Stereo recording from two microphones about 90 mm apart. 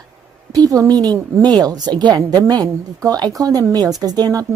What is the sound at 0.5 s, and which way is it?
A woman's voice, 40° right (ahead or behind).